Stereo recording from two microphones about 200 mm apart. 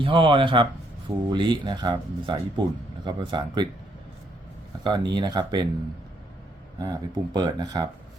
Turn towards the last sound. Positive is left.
turn(degrees=-20)  # may be behind; listen again after turning